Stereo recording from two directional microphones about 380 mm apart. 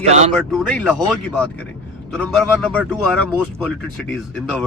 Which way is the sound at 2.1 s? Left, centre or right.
Centre.